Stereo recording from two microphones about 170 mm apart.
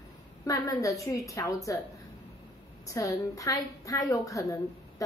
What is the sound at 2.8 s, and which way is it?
A woman's voice, 20° left (ahead or behind).